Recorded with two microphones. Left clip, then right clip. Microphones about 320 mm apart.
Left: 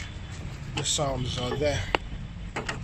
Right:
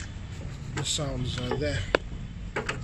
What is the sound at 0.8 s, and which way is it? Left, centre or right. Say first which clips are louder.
Speech: left 4 dB; centre.